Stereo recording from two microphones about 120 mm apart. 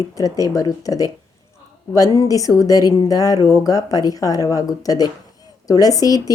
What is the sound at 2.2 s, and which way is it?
Speech, 30° left (ahead or behind).